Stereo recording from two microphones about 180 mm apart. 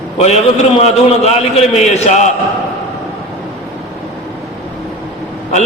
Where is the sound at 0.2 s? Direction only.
35° left (ahead or behind).